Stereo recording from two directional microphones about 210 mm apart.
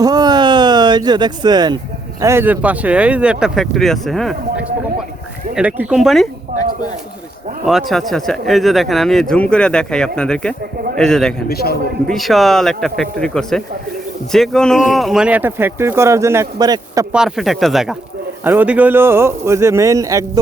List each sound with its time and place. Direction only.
0.0 s a sound: 20° right (ahead or behind)
2.2 s speech: 10° right (ahead or behind)
5.5 s speech: 5° right (ahead or behind)
7.6 s speech: centre (ahead or behind)
11.4 s a man's voice: 50° left (ahead or behind)
12.0 s speech: centre (ahead or behind); by 17.1 s 15° right (ahead or behind)
17.1 s speech: centre (ahead or behind)